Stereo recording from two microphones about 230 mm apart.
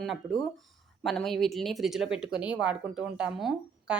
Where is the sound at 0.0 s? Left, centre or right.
Centre.